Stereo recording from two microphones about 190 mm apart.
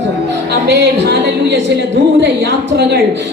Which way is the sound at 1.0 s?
60° right (ahead or behind).